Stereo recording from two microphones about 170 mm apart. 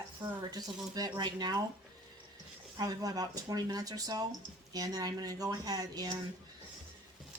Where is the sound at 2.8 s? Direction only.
20° right (ahead or behind).